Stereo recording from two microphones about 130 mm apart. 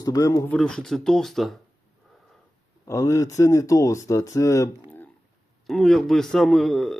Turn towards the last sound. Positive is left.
turn(degrees=0)  # may be behind; listen again after turning